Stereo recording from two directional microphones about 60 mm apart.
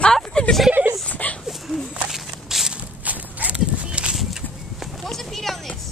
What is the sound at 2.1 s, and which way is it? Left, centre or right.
Walk, centre.